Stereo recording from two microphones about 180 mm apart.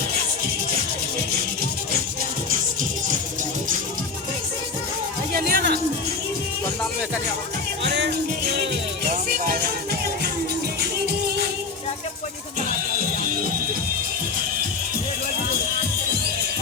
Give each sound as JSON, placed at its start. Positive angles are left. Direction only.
{"t": 5.3, "sound": "music", "side_deg": -55}
{"t": 7.9, "sound": "music", "side_deg": -70}
{"t": 9.0, "sound": "music", "side_deg": -55}